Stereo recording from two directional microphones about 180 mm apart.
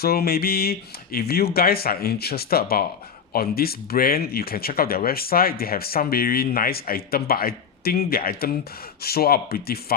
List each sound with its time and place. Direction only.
0.0 s speech: 60° left (ahead or behind)